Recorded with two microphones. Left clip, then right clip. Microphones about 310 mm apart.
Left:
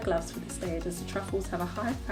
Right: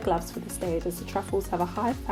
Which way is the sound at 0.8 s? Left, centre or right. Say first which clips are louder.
Right 4 dB; right.